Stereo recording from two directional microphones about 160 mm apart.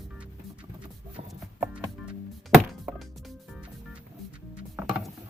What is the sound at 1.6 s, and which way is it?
Music, 5° right (ahead or behind).